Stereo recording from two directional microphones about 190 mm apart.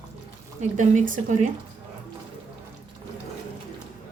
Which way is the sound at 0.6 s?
40° right (ahead or behind).